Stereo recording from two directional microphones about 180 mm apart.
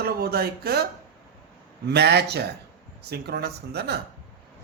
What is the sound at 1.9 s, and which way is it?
A man's voice, 65° right (ahead or behind).